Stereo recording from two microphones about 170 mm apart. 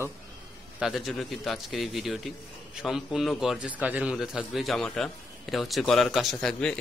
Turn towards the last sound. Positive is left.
turn(degrees=5)  # may be behind; listen again after turning